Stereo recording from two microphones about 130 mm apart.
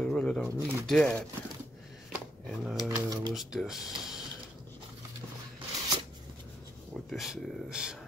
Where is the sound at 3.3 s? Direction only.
Centre (ahead or behind).